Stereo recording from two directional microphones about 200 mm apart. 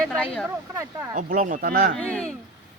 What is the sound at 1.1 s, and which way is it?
Speech, 40° right (ahead or behind).